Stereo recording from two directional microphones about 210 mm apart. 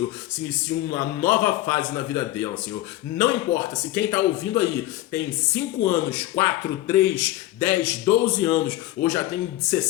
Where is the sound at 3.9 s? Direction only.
20° left (ahead or behind).